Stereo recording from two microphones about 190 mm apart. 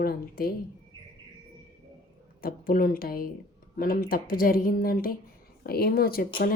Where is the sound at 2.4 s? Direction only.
50° left (ahead or behind).